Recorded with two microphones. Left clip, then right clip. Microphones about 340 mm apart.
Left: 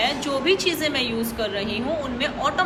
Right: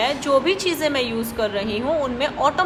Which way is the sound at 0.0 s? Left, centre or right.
Right.